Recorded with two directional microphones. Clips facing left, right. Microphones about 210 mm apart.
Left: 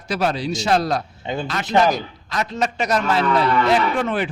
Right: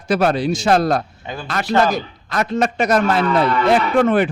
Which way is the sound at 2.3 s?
55° right (ahead or behind).